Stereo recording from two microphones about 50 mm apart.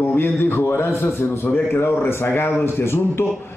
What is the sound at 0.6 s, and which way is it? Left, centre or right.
A man's voice, left.